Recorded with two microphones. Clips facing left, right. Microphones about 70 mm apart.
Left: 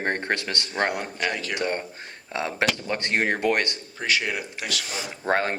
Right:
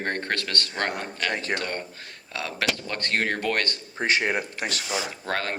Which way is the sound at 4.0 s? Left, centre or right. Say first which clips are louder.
Right 2 dB; right.